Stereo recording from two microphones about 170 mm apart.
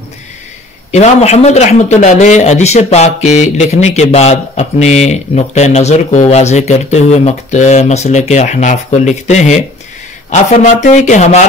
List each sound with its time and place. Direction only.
0.9 s speech: 40° left (ahead or behind)